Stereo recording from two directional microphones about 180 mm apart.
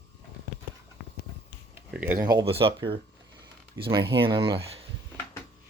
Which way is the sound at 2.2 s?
30° right (ahead or behind).